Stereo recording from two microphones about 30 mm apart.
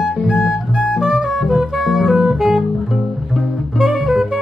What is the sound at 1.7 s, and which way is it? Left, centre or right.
Music, centre.